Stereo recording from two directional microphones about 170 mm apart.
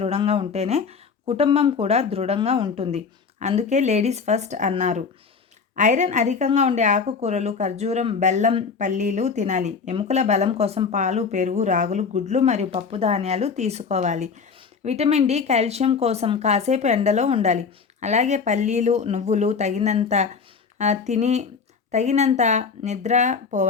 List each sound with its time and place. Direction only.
0.0 s a woman's voice: 35° right (ahead or behind)